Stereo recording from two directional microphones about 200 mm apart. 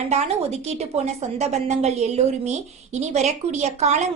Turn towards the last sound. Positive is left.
turn(degrees=-35)  # may be behind; listen again after turning